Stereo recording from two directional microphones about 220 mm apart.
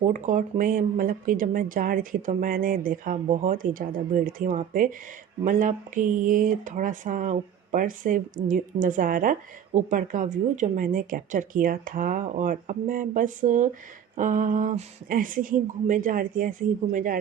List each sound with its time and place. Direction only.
0.0 s speech: 35° right (ahead or behind)